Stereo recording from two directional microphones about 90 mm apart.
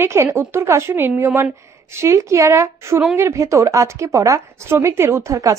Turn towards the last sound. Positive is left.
turn(degrees=-35)  # may be behind; listen again after turning